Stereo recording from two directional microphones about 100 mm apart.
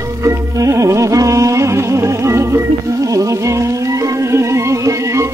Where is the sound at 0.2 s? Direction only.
30° right (ahead or behind).